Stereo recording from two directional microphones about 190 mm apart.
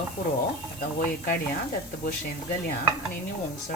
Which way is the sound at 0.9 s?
50° left (ahead or behind).